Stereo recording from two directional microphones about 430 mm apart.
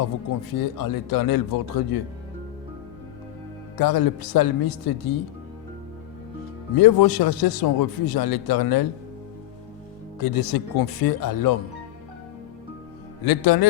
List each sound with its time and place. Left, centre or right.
0.5 s a man's voice: left
3.8 s a man's voice: left
6.7 s a man's voice: left
10.2 s a man's voice: left
13.2 s a man's voice: left